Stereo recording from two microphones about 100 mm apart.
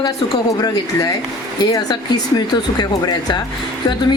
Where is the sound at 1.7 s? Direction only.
40° left (ahead or behind).